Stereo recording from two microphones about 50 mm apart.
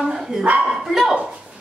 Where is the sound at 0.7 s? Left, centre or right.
Centre.